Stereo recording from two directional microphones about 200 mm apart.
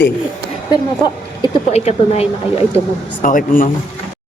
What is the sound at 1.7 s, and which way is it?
Speech, 30° left (ahead or behind).